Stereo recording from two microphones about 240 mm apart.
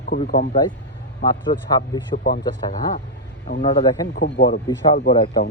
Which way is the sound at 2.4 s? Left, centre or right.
Left.